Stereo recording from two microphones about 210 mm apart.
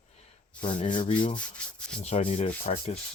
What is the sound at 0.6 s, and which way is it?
Sanding, 25° left (ahead or behind).